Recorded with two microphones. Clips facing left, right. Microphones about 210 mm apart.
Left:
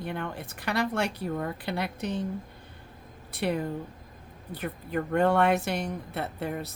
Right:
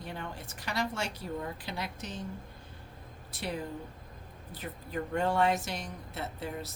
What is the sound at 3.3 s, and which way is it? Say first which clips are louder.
Speech: left 8 dB; 60° left (ahead or behind).